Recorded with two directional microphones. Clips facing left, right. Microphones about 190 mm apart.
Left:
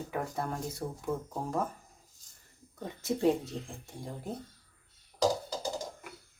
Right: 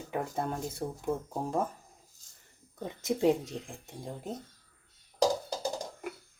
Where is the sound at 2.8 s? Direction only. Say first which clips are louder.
Right 1 dB; 20° right (ahead or behind).